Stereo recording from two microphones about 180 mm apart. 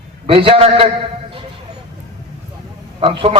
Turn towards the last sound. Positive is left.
turn(degrees=-30)  # may be behind; listen again after turning